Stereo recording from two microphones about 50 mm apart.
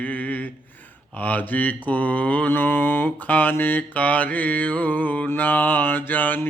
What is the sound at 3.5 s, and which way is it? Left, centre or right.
Mantra, left.